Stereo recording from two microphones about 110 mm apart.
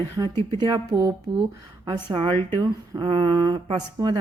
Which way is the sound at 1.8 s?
45° right (ahead or behind).